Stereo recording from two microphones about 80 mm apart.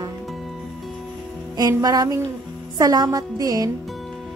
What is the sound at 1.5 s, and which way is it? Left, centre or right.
A woman's voice, right.